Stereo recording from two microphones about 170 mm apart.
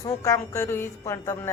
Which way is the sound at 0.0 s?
20° left (ahead or behind).